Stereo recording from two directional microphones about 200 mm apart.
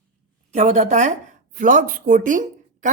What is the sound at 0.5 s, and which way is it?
A woman's voice, 35° right (ahead or behind).